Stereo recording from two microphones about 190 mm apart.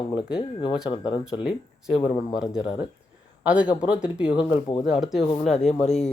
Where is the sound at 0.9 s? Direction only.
25° left (ahead or behind).